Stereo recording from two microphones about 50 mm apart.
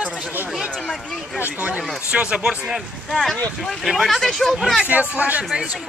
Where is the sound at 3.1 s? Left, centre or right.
Centre.